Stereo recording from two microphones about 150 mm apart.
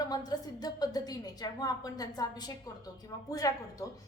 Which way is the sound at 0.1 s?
25° left (ahead or behind).